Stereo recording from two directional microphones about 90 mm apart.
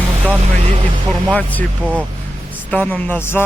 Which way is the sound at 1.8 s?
20° right (ahead or behind).